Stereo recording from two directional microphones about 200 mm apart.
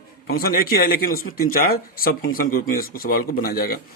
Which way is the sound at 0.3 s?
45° left (ahead or behind).